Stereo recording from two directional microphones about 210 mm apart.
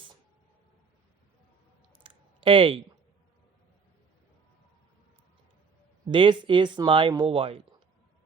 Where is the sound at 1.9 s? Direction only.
25° right (ahead or behind).